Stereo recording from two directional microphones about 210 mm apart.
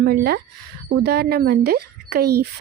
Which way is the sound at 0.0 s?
45° right (ahead or behind).